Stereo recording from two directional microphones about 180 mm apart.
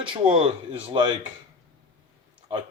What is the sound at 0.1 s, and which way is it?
Speech, 30° right (ahead or behind).